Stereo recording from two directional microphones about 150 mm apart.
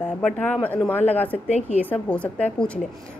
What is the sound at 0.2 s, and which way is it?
Speech, 10° left (ahead or behind).